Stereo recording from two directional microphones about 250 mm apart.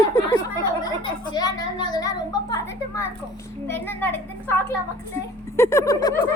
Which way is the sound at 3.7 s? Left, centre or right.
Centre.